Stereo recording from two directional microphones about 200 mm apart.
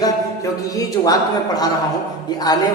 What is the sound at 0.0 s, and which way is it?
Music, 20° left (ahead or behind).